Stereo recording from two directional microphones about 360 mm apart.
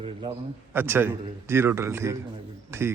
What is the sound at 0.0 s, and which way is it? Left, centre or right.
A man's voice, centre.